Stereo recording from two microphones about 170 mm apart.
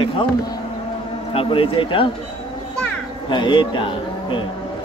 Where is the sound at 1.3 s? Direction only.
30° left (ahead or behind).